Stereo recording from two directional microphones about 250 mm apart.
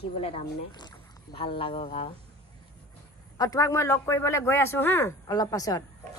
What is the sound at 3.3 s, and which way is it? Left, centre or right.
Speech, centre.